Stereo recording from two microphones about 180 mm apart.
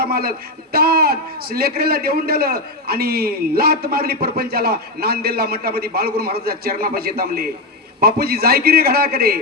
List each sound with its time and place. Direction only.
0.0 s a man's voice: 55° right (ahead or behind)